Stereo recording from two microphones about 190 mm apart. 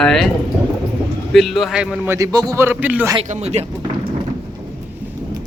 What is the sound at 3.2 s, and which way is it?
Speech, 35° right (ahead or behind).